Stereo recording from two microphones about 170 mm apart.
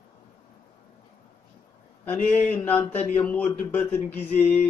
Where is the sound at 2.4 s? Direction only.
10° left (ahead or behind).